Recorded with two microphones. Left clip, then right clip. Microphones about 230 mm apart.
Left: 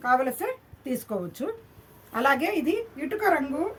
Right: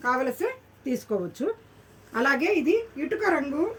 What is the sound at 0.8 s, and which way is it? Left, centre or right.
A woman's voice, left.